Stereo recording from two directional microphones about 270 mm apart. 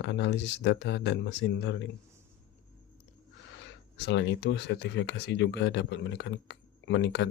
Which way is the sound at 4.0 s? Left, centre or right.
Left.